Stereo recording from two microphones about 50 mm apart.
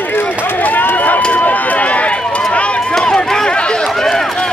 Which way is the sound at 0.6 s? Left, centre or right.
Left.